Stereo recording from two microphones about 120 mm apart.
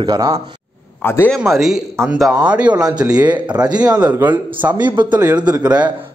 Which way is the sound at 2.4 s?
10° right (ahead or behind).